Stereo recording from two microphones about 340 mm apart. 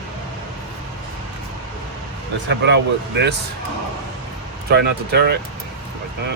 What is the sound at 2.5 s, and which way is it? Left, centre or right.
Speech, right.